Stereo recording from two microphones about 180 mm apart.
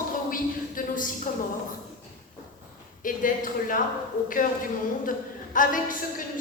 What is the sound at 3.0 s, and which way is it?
A woman's voice, 50° left (ahead or behind).